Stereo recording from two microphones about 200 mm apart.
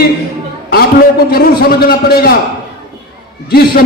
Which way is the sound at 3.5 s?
50° left (ahead or behind).